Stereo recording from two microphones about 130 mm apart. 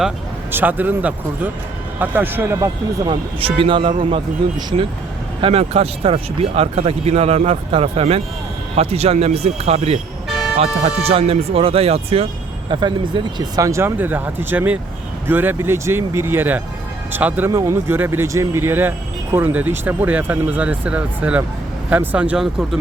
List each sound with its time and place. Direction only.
0.5 s speech: 15° right (ahead or behind)
3.1 s speech: 40° right (ahead or behind)
10.2 s vehicle: centre (ahead or behind)
10.8 s speech: 50° right (ahead or behind)
12.7 s speech: 35° right (ahead or behind); by 22.8 s 5° right (ahead or behind)